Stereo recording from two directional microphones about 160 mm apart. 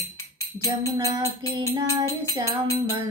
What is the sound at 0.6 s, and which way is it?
Music, 20° right (ahead or behind).